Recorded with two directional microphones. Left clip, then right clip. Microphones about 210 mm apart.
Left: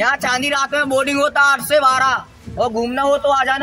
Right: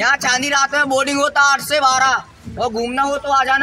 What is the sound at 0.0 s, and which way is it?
Speech, 20° left (ahead or behind).